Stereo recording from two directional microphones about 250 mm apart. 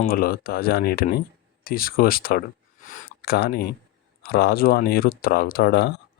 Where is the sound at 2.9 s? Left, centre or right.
Left.